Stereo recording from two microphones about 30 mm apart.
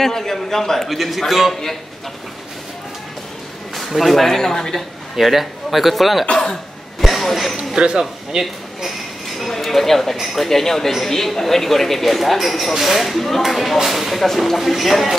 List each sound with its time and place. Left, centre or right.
0.0 s speech: centre
0.8 s speech: centre
3.7 s speech: centre
4.4 s speech: centre
5.2 s speech: centre
7.5 s speech: right
8.0 s speech: centre
9.5 s speech: centre